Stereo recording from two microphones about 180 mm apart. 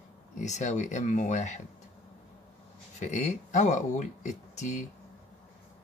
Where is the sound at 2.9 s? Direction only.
40° left (ahead or behind).